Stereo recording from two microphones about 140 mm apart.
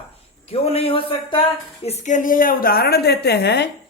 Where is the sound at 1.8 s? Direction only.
55° left (ahead or behind); by 3.0 s 90° left.